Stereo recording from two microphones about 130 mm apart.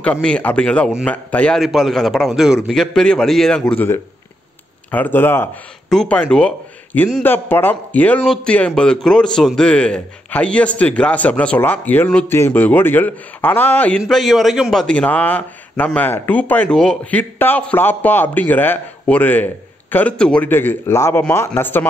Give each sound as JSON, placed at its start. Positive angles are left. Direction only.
{"t": 0.0, "sound": "a man's voice", "side_deg": 10}
{"t": 1.6, "sound": "a man's voice", "side_deg": 0}
{"t": 5.9, "sound": "a man's voice", "side_deg": 5}